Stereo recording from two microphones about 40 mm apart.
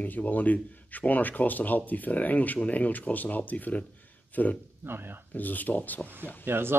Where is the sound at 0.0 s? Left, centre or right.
Left.